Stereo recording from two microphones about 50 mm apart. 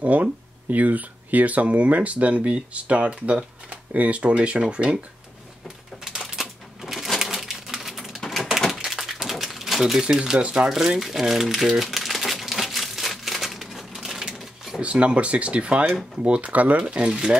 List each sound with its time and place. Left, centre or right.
0.0 s speech: right
6.0 s typewriter: centre
8.5 s a sound: centre
10.0 s speech: centre
10.7 s speech: centre
11.8 s crumpling: centre
14.8 s speech: right